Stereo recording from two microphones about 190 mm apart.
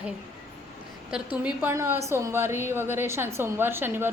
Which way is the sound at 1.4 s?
10° right (ahead or behind).